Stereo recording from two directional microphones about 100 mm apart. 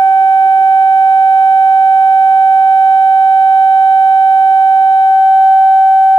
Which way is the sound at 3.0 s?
40° left (ahead or behind).